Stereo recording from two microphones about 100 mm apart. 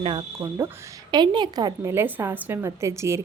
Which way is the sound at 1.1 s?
50° right (ahead or behind).